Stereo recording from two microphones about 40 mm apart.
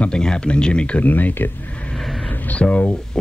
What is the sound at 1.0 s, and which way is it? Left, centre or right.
Speech, left.